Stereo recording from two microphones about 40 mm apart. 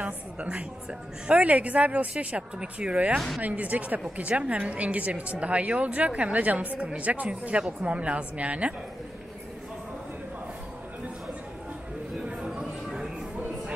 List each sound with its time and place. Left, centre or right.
0.0 s a woman's voice: right
3.4 s a woman's voice: right
12.4 s a sound: centre